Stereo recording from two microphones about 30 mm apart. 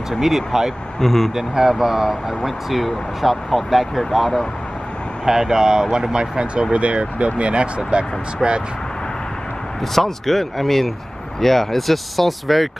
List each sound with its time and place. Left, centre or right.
0.2 s speech: centre
0.9 s speech: centre
1.3 s speech: centre
5.2 s speech: centre
9.9 s speech: centre